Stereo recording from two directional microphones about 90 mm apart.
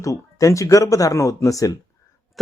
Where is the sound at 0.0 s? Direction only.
35° left (ahead or behind).